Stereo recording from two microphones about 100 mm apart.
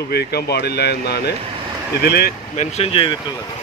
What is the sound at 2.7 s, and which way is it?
Speech, 75° left (ahead or behind).